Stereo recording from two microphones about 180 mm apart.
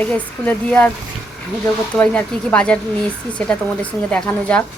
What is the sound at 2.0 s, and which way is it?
Speech, 10° left (ahead or behind).